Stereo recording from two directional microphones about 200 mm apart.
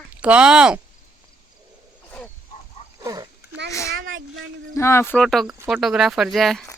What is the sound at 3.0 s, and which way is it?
Speech, 20° right (ahead or behind).